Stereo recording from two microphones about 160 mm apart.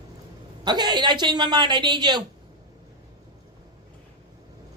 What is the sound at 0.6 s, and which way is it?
A woman's voice, 25° right (ahead or behind).